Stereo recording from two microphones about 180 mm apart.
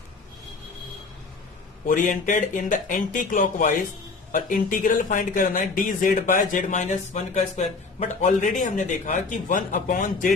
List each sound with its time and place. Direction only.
1.9 s speech: 50° left (ahead or behind)